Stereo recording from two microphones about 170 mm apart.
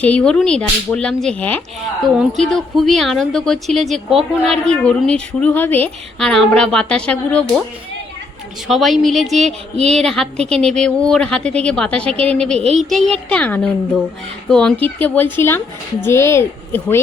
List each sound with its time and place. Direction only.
0.0 s speech: 5° left (ahead or behind)
8.6 s speech: centre (ahead or behind)